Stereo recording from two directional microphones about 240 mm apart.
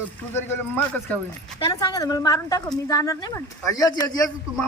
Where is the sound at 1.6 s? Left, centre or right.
Centre.